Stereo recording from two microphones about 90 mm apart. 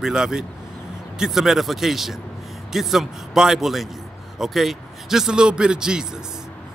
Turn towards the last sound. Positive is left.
turn(degrees=-10)  # may be behind; listen again after turning